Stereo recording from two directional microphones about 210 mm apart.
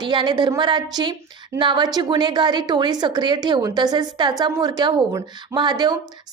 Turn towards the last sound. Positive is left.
turn(degrees=-20)  # may be behind; listen again after turning